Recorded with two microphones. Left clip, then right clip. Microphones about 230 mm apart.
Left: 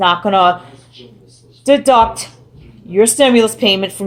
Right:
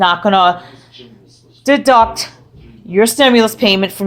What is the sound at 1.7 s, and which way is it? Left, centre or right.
Speech, right.